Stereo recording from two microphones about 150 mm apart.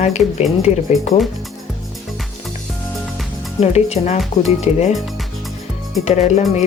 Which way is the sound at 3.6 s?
45° left (ahead or behind).